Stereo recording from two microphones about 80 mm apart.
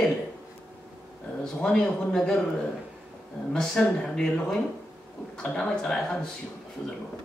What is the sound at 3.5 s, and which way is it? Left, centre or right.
Speech, centre.